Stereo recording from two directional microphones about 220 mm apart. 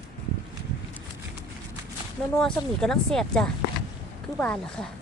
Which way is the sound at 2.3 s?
5° left (ahead or behind).